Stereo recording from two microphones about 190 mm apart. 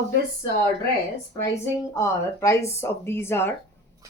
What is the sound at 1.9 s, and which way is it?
A woman's voice, 15° left (ahead or behind).